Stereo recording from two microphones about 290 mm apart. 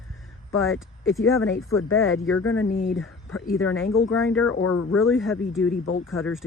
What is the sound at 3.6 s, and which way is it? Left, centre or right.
Speech, left.